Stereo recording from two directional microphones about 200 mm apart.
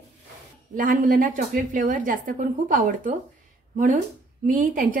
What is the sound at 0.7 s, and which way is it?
A woman's voice, 40° right (ahead or behind).